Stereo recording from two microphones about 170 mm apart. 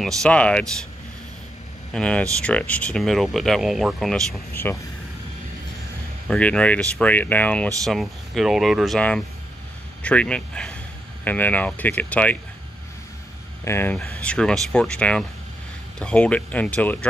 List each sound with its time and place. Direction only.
0.0 s speech: 5° left (ahead or behind)
1.9 s speech: 5° left (ahead or behind)
6.2 s speech: 5° left (ahead or behind)
13.7 s speech: 15° left (ahead or behind)